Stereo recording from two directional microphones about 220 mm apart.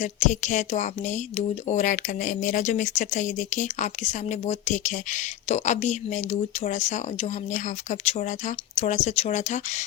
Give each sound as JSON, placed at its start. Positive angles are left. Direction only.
{"t": 0.0, "sound": "speech", "side_deg": 35}